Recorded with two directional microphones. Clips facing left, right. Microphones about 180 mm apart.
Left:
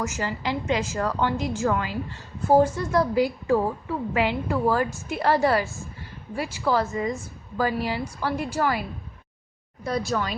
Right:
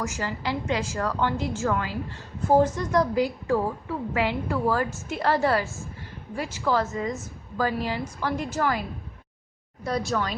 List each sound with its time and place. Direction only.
0.0 s a woman's voice: 20° left (ahead or behind)
9.8 s speech: centre (ahead or behind)